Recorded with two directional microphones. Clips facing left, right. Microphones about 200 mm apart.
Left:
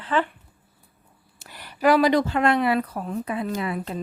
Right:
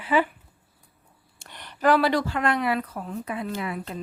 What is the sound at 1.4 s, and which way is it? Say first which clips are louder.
Speech: left 3 dB; 5° left (ahead or behind).